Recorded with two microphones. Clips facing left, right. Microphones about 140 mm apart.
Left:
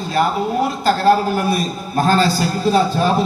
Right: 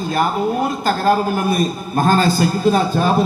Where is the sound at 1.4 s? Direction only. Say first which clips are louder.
Right 1 dB; 50° right (ahead or behind).